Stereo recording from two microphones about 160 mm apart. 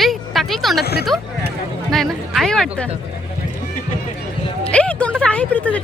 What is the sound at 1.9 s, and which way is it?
Speech, centre (ahead or behind).